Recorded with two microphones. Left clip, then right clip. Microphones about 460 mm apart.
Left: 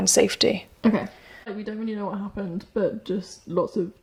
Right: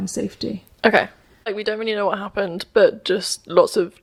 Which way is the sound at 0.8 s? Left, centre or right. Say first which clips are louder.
Right 11 dB; right.